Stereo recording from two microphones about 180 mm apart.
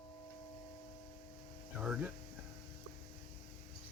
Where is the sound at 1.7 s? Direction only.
5° right (ahead or behind).